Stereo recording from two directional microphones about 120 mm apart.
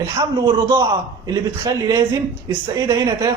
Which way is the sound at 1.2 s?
35° right (ahead or behind).